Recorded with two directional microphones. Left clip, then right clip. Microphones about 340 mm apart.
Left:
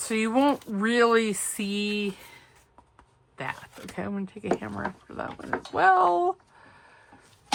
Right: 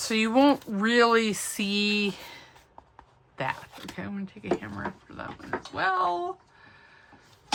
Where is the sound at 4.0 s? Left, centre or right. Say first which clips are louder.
Left 7 dB; centre.